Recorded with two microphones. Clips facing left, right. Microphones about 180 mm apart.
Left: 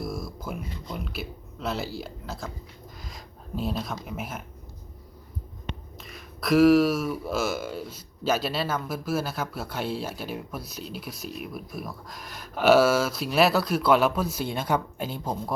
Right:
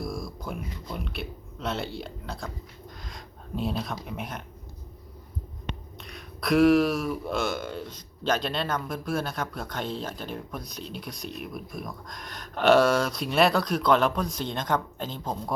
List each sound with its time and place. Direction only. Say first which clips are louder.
0.0 s speech: left 1 dB; centre (ahead or behind)
6.0 s speech: even; centre (ahead or behind)